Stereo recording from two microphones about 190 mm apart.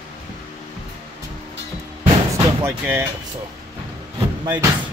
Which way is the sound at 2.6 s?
10° right (ahead or behind).